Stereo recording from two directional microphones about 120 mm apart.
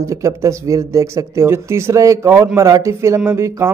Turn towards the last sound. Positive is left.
turn(degrees=-25)  # may be behind; listen again after turning